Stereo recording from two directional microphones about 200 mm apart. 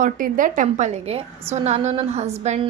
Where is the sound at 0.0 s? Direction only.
40° right (ahead or behind).